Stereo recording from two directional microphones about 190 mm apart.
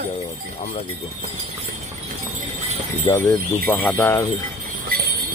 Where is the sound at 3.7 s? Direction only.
10° left (ahead or behind).